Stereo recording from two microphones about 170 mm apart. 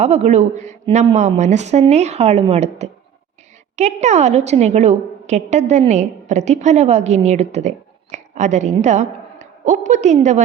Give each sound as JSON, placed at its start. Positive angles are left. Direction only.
{"t": 0.0, "sound": "a woman's voice", "side_deg": -40}